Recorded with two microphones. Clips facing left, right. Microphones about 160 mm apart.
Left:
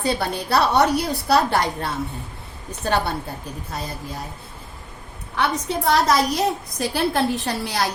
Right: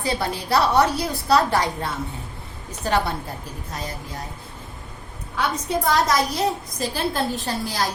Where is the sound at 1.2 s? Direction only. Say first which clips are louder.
Right 1 dB; 65° left (ahead or behind).